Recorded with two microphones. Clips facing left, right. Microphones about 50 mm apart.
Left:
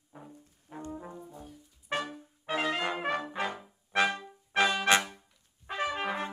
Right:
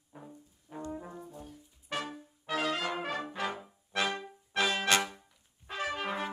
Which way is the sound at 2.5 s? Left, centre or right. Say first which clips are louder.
Left 2 dB; left.